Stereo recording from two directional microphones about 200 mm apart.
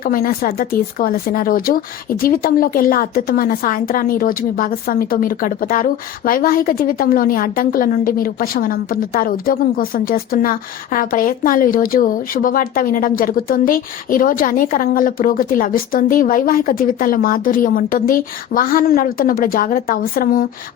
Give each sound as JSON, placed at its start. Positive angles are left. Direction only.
{"t": 0.0, "sound": "speech", "side_deg": 45}